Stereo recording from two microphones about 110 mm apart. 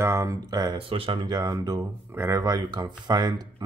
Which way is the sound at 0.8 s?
55° right (ahead or behind).